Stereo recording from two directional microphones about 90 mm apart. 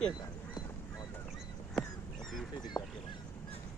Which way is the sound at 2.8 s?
40° left (ahead or behind).